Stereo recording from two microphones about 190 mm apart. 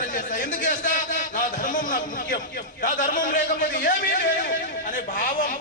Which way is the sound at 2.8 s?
45° left (ahead or behind).